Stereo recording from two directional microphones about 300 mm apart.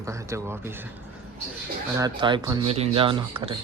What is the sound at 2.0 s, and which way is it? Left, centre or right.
Speech, centre.